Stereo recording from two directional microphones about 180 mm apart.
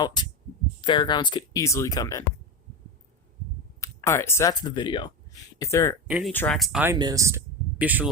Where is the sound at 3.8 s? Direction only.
15° left (ahead or behind).